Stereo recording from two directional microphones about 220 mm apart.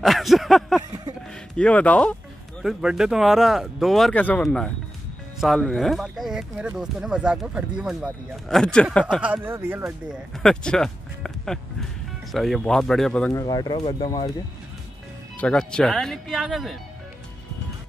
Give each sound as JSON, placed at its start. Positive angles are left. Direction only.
{"t": 0.0, "sound": "a sound", "side_deg": 0}
{"t": 1.6, "sound": "speech", "side_deg": 5}
{"t": 10.3, "sound": "speech", "side_deg": 5}
{"t": 15.3, "sound": "speech", "side_deg": 5}